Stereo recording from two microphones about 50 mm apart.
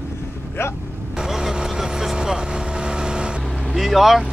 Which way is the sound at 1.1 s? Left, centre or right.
Centre.